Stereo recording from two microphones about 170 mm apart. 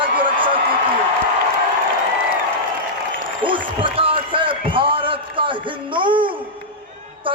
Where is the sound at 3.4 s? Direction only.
30° right (ahead or behind).